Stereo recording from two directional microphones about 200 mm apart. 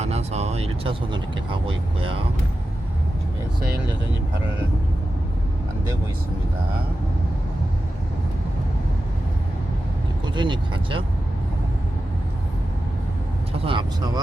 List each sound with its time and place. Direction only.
0.0 s speech: 35° right (ahead or behind)
10.3 s speech: 25° right (ahead or behind)
13.6 s speech: 25° right (ahead or behind)